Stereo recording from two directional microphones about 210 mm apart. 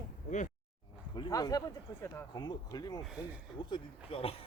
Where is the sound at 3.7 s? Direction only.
25° left (ahead or behind).